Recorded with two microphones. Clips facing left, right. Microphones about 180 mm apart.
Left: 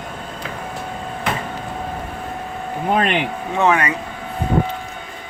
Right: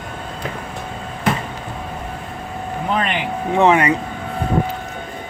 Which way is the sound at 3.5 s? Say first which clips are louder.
Right 4 dB; 20° right (ahead or behind).